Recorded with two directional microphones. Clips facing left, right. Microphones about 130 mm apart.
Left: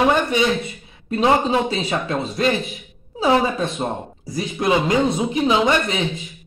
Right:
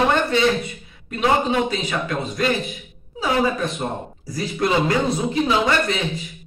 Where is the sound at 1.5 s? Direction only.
30° left (ahead or behind).